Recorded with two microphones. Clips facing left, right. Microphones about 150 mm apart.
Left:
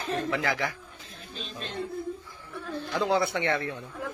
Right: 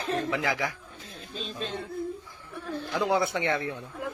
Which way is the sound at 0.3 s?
15° right (ahead or behind).